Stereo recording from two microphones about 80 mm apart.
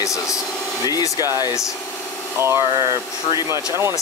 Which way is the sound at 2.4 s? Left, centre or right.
Right.